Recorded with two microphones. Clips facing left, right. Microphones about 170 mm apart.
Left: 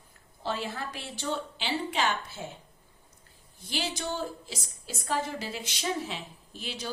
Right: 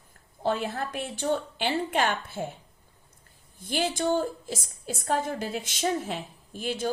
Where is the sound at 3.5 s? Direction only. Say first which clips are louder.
Right 6 dB; 50° right (ahead or behind).